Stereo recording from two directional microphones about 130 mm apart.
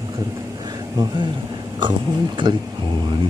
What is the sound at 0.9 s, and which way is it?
Speech, 30° right (ahead or behind).